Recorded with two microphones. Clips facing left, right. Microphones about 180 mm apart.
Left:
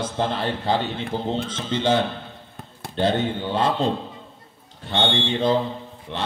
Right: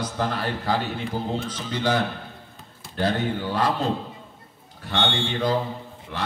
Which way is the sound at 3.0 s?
25° left (ahead or behind).